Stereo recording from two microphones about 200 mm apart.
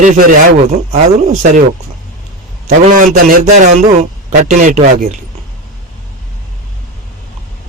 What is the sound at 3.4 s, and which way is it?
A man's voice, 35° right (ahead or behind).